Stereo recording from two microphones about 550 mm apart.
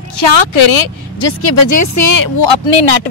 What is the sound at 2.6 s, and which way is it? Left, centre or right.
Speech, left.